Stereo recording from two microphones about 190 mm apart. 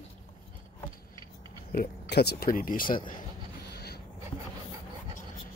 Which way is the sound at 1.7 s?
55° left (ahead or behind).